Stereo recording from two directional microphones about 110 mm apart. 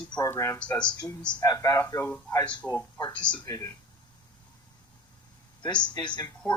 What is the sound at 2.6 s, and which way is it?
Speech, 15° left (ahead or behind).